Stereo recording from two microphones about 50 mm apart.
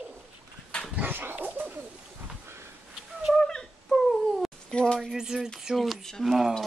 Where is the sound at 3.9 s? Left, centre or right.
Centre.